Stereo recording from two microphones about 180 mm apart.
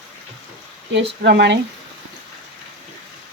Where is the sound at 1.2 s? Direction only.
70° right (ahead or behind).